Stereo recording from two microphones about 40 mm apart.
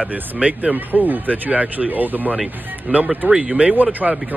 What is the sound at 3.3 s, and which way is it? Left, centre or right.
Speech, right.